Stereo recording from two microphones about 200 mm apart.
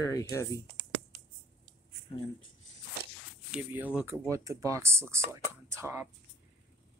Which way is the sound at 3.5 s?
5° right (ahead or behind).